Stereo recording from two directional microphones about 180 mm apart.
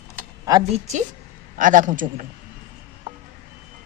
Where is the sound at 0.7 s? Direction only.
40° right (ahead or behind).